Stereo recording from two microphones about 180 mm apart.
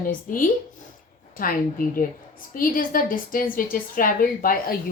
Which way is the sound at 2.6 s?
50° left (ahead or behind).